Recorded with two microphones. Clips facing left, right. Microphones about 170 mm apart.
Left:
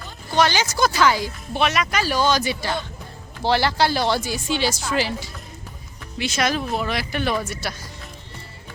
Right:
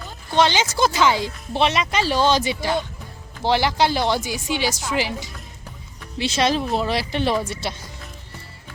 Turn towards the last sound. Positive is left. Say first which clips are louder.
# right 2 dB
turn(degrees=-25)  # may be behind; listen again after turning